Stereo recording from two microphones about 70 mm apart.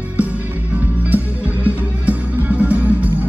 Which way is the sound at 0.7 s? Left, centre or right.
Right.